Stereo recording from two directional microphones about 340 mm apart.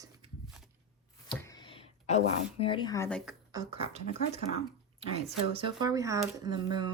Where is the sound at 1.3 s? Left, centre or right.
Centre.